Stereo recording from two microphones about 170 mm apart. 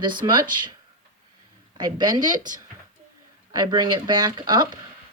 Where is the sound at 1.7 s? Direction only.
25° right (ahead or behind).